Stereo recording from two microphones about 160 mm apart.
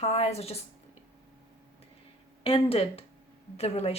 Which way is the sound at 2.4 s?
35° left (ahead or behind).